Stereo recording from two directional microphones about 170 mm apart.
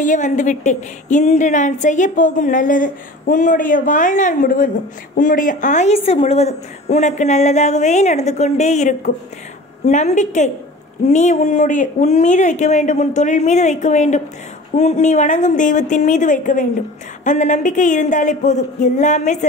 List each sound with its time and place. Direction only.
0.0 s a woman's voice: 45° left (ahead or behind)